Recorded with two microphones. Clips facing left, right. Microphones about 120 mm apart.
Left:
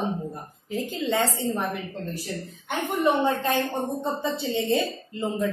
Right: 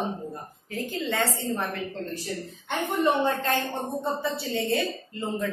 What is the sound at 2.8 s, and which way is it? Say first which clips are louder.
A woman's voice: left 1 dB; 15° left (ahead or behind).